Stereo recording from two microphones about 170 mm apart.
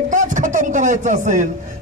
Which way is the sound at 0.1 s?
50° right (ahead or behind).